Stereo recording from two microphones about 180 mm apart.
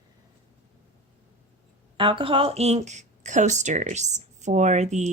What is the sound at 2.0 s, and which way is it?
Speech, 30° right (ahead or behind).